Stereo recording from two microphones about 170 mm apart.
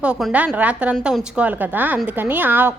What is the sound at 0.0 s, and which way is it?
A woman's voice, 5° right (ahead or behind).